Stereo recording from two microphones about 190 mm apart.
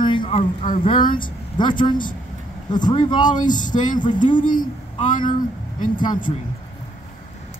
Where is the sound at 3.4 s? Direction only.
45° left (ahead or behind).